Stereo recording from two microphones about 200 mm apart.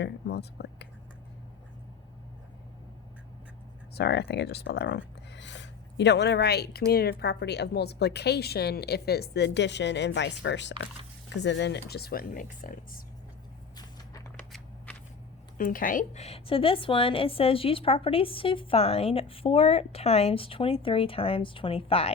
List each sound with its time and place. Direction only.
0.0 s speech: 55° left (ahead or behind)
3.9 s speech: 55° left (ahead or behind)
13.7 s walk: 20° left (ahead or behind)
14.3 s a sound: 5° left (ahead or behind)
15.5 s a woman's voice: 45° left (ahead or behind); by 22.1 s 30° left (ahead or behind)